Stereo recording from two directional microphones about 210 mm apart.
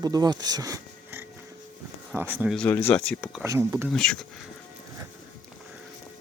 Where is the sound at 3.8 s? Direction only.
5° left (ahead or behind).